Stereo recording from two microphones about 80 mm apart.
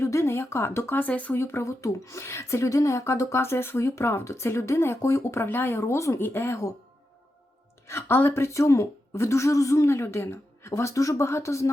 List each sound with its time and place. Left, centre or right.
0.0 s speech: left
1.0 s speech: centre
1.4 s speech: left
5.8 s speech: left
7.9 s speech: left